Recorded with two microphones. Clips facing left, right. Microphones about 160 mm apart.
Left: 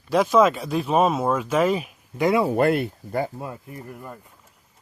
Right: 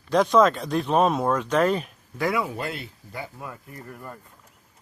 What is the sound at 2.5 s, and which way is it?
Speech, 55° left (ahead or behind).